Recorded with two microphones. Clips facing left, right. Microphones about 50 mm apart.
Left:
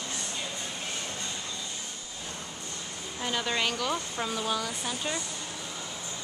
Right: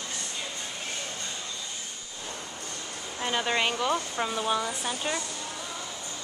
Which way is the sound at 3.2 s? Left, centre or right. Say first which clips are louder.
Right 3 dB; centre.